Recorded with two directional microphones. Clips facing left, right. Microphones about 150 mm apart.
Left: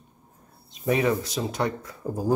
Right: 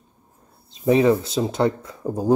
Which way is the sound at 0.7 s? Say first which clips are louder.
Right 7 dB; 30° right (ahead or behind).